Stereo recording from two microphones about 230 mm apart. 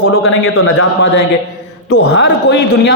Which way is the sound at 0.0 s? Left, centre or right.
Left.